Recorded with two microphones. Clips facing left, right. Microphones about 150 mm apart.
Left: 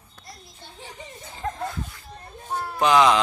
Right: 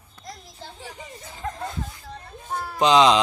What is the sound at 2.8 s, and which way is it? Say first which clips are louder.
Speech: right 1 dB; 20° right (ahead or behind).